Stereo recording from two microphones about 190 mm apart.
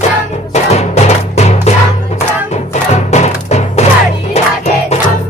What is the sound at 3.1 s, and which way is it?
Music, 35° left (ahead or behind).